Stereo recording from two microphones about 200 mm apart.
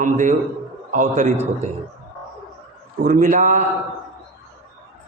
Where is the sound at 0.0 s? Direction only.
40° right (ahead or behind).